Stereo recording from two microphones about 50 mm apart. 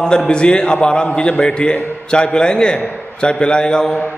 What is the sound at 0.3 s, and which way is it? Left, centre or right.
A man's voice, centre.